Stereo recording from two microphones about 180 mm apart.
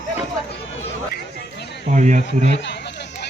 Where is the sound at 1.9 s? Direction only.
40° right (ahead or behind).